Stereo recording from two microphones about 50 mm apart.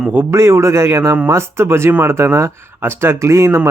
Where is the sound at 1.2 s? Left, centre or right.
Right.